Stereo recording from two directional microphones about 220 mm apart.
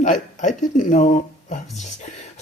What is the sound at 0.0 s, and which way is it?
Speech, 35° left (ahead or behind).